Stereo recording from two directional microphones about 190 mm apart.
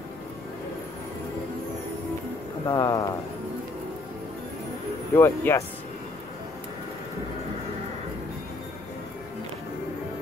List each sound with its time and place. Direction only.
2.6 s a man's voice: 20° left (ahead or behind)
5.1 s speech: 10° left (ahead or behind)